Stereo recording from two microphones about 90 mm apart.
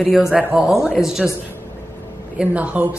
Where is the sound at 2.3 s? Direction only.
15° right (ahead or behind).